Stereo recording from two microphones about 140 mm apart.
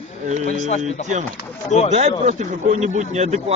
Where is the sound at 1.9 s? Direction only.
55° right (ahead or behind).